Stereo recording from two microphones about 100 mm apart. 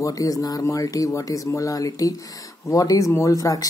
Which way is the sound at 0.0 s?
35° left (ahead or behind).